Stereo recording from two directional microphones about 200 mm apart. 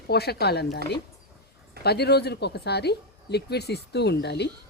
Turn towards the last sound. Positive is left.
turn(degrees=55)  # may be behind; listen again after turning